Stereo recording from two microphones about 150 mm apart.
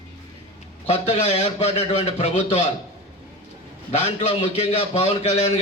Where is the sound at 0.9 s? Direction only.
45° left (ahead or behind).